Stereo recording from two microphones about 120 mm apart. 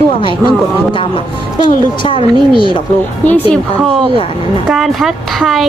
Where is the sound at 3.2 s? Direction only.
10° left (ahead or behind).